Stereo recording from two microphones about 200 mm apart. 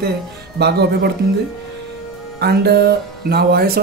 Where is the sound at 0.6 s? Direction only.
55° right (ahead or behind).